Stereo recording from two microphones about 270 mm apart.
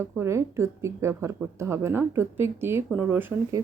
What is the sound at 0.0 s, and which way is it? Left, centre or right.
Speech, centre.